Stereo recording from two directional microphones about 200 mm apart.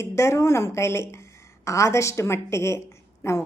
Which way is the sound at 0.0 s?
15° left (ahead or behind).